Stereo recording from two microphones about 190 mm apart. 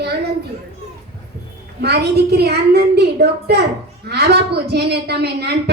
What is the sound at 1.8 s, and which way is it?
A woman's voice, 60° right (ahead or behind).